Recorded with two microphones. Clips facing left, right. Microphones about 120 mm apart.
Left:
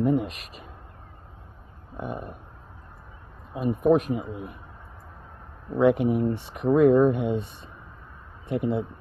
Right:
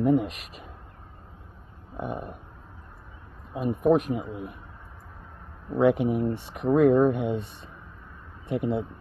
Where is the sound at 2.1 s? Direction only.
Centre (ahead or behind).